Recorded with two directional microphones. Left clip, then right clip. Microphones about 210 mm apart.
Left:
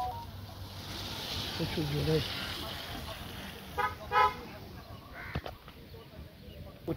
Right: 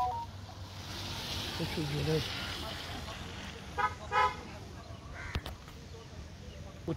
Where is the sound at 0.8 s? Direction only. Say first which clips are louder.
Left 1 dB; 55° left (ahead or behind).